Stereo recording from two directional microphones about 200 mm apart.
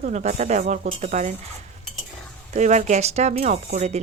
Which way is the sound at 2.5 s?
35° right (ahead or behind).